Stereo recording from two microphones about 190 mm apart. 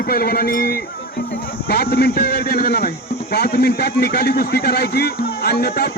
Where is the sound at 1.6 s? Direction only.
55° left (ahead or behind).